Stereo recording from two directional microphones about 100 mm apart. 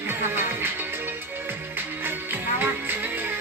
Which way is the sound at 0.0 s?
20° right (ahead or behind).